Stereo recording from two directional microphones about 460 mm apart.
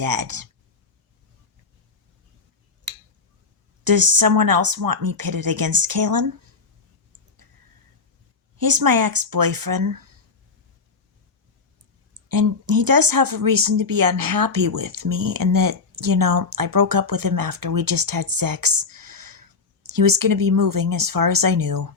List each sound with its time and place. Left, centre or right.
0.0 s speech: right
3.8 s speech: right
8.5 s speech: right
12.3 s speech: right